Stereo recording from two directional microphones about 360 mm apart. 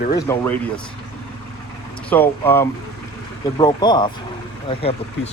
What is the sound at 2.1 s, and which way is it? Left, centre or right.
Speech, centre.